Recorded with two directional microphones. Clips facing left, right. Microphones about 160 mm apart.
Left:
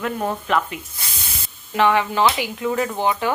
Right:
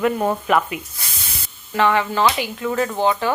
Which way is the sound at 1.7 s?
15° left (ahead or behind).